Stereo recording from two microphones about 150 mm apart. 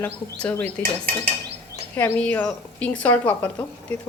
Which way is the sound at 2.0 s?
10° left (ahead or behind).